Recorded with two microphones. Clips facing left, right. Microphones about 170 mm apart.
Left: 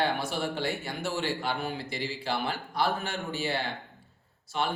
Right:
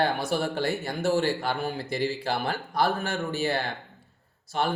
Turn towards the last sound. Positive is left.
turn(degrees=-45)  # may be behind; listen again after turning